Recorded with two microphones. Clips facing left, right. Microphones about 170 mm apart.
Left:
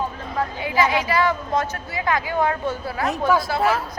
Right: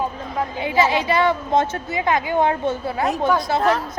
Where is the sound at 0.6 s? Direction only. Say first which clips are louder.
Right 3 dB; 25° right (ahead or behind).